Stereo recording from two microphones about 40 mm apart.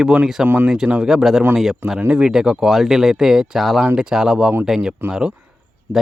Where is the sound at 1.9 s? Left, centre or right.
Right.